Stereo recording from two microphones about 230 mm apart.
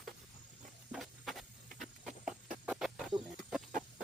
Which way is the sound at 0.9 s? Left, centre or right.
Centre.